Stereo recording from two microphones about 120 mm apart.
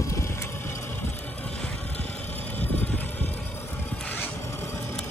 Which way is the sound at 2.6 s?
15° left (ahead or behind).